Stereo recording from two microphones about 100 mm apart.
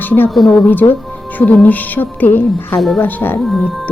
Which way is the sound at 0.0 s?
20° left (ahead or behind).